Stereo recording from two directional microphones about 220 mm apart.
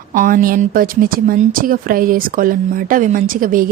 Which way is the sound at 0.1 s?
40° right (ahead or behind).